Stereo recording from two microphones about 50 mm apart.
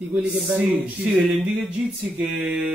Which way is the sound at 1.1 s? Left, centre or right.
Centre.